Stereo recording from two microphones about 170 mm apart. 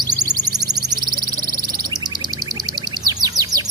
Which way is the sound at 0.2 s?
25° right (ahead or behind).